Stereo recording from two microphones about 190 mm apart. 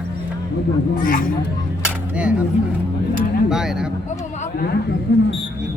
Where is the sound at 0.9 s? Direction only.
45° left (ahead or behind).